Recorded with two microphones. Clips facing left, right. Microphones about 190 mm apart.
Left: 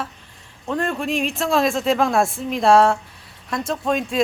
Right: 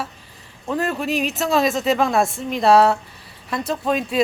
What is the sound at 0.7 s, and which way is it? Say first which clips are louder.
Speech: even; 5° right (ahead or behind).